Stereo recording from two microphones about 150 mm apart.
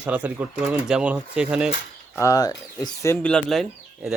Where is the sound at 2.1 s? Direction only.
20° left (ahead or behind); by 4.1 s centre (ahead or behind).